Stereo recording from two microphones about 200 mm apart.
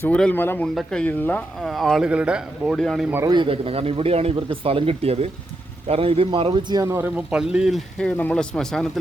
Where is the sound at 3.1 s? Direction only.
20° right (ahead or behind).